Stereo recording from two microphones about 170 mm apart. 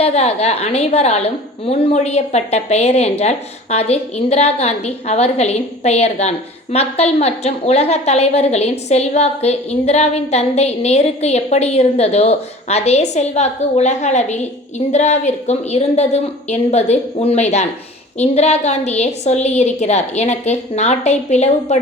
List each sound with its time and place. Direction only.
0.0 s a woman's voice: 40° left (ahead or behind)